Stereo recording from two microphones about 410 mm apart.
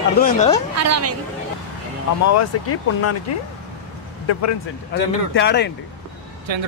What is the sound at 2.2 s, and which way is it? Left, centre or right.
Speech, left.